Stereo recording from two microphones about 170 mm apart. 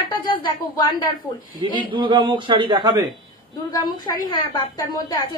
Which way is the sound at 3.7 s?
20° left (ahead or behind).